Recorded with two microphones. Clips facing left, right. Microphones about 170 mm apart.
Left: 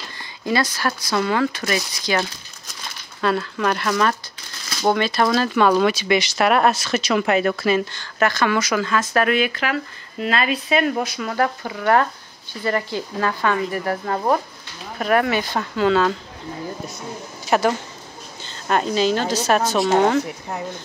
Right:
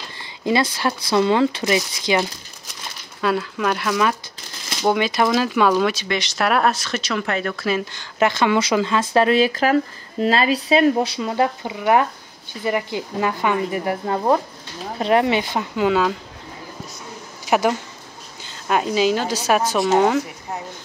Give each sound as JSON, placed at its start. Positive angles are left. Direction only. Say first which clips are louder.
{"t": 0.5, "sound": "speech", "louder": "right 2 dB", "side_deg": -25}
{"t": 3.2, "sound": "a woman's voice", "louder": "even", "side_deg": -5}
{"t": 7.9, "sound": "a woman's voice", "louder": "right 1 dB", "side_deg": -20}
{"t": 17.5, "sound": "a woman's voice", "louder": "even", "side_deg": -15}